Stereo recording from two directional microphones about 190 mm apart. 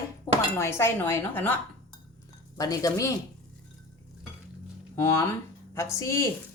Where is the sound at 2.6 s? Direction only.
20° left (ahead or behind).